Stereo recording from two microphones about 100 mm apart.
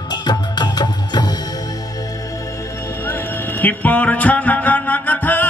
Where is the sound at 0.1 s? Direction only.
45° left (ahead or behind).